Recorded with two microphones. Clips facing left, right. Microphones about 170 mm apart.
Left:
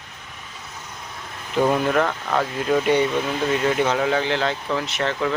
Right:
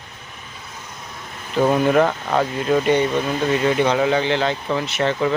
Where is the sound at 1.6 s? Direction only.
10° right (ahead or behind).